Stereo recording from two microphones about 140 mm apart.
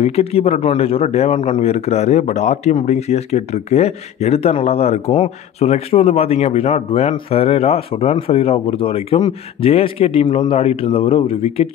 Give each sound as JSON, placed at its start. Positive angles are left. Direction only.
{"t": 0.0, "sound": "speech", "side_deg": 45}